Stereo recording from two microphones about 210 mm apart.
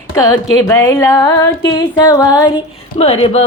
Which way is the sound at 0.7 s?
10° left (ahead or behind).